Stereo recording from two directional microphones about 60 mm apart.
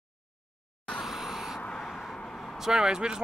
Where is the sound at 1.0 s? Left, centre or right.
Centre.